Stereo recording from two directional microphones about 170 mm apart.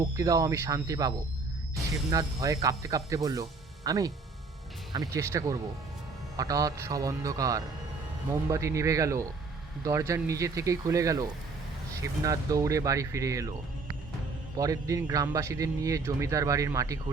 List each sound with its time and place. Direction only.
0.0 s a man's voice: 20° right (ahead or behind)
14.5 s a man's voice: 20° right (ahead or behind)